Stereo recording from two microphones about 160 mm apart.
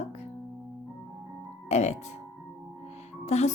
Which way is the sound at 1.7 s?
45° left (ahead or behind).